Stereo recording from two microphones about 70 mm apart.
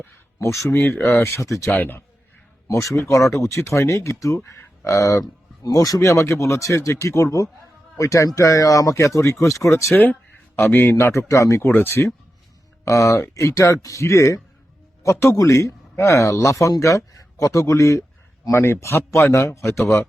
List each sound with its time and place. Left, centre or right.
0.3 s a man's voice: left
1.7 s a man's voice: left
2.8 s speech: left
5.2 s speech: left
9.9 s a man's voice: left
11.7 s a man's voice: left
12.8 s a man's voice: left